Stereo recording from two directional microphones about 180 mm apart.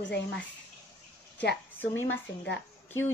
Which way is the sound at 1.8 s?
10° left (ahead or behind).